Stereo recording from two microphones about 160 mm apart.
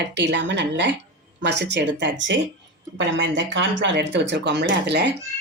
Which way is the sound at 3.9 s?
90° right.